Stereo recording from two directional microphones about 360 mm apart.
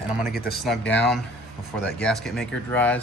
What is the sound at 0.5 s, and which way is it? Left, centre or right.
Mechanisms, centre.